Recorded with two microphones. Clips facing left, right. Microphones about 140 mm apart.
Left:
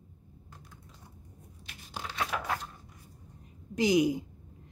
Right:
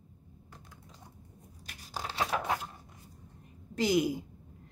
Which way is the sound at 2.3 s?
20° right (ahead or behind).